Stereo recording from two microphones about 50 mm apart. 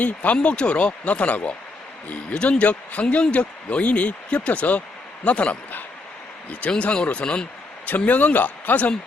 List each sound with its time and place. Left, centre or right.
0.0 s a man's voice: left
7.9 s a man's voice: left